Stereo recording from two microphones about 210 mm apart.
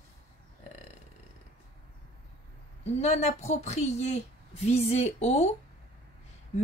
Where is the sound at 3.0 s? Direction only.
30° left (ahead or behind).